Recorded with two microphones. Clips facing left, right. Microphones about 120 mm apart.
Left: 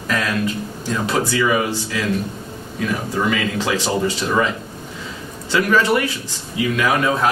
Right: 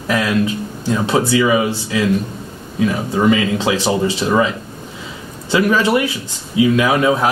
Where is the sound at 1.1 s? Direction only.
20° right (ahead or behind).